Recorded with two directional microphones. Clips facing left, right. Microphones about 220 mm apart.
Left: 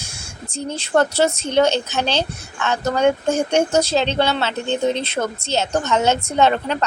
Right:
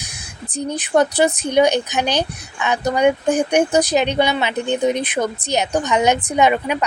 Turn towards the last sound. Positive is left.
turn(degrees=-10)  # may be behind; listen again after turning